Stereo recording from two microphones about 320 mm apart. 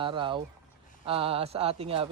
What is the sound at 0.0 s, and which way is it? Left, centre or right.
Speech, centre.